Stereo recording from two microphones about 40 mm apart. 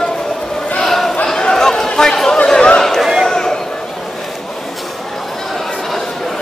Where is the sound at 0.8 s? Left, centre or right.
Centre.